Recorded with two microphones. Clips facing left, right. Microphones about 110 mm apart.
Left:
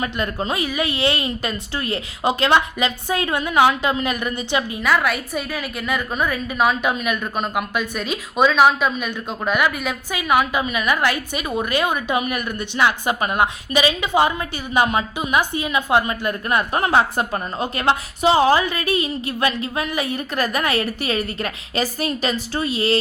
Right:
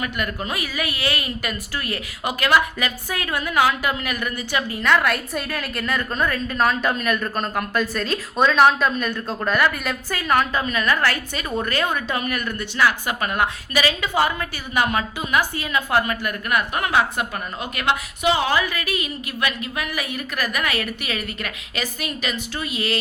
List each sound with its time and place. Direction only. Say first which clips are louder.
0.0 s a woman's voice: left 3 dB; 25° left (ahead or behind)
4.8 s a woman's voice: right 2 dB; 5° left (ahead or behind); by 23.0 s 30° left (ahead or behind)